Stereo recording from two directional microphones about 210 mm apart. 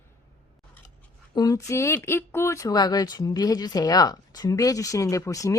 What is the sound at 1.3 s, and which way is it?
Speech, 20° left (ahead or behind).